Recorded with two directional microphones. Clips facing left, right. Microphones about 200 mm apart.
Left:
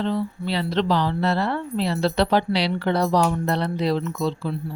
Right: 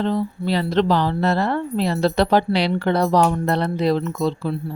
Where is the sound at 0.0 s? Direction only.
45° right (ahead or behind).